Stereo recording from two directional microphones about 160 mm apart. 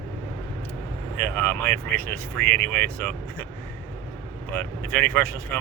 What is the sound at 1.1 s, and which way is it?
Speech, 10° left (ahead or behind).